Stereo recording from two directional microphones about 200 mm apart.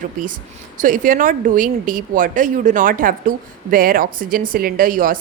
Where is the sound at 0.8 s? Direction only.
40° right (ahead or behind).